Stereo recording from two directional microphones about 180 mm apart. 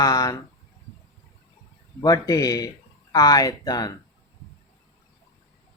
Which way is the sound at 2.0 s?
20° left (ahead or behind).